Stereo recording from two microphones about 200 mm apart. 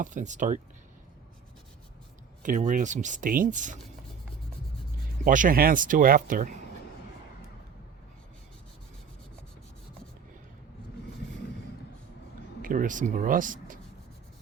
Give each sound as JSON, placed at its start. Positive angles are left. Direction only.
{"t": 0.0, "sound": "speech", "side_deg": -40}
{"t": 2.4, "sound": "speech", "side_deg": -40}
{"t": 5.2, "sound": "speech", "side_deg": -40}
{"t": 12.6, "sound": "speech", "side_deg": -40}